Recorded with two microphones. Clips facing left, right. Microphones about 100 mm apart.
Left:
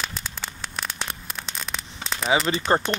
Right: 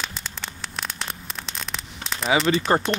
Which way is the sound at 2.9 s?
20° right (ahead or behind).